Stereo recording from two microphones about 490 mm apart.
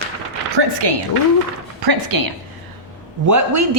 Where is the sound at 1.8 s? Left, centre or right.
Right.